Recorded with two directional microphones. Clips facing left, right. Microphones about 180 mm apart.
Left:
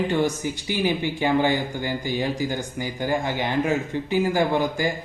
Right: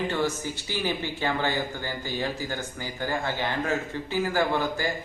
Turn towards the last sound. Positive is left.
turn(degrees=15)  # may be behind; listen again after turning